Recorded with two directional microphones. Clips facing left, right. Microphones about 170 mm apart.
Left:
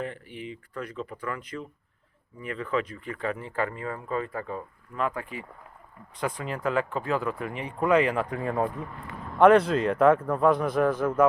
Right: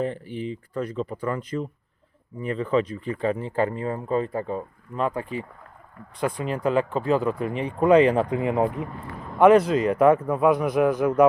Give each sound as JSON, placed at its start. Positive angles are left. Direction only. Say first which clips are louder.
{"t": 0.0, "sound": "speech", "louder": "right 7 dB", "side_deg": -35}
{"t": 6.1, "sound": "speech", "louder": "right 5 dB", "side_deg": -10}
{"t": 9.4, "sound": "a man's voice", "louder": "right 2 dB", "side_deg": -5}